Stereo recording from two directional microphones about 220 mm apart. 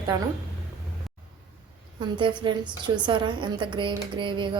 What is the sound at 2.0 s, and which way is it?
A woman's voice, 20° right (ahead or behind).